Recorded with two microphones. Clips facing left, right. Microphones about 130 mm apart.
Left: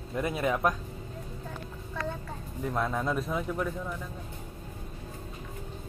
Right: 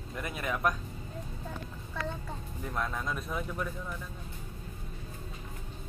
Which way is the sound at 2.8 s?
10° left (ahead or behind).